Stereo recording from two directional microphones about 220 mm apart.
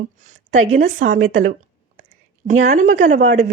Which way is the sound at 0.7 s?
35° right (ahead or behind).